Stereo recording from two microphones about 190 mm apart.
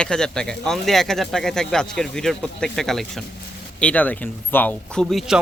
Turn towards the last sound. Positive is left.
turn(degrees=0)  # may be behind; listen again after turning